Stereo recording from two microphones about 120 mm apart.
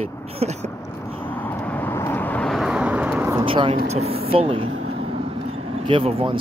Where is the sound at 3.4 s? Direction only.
50° right (ahead or behind).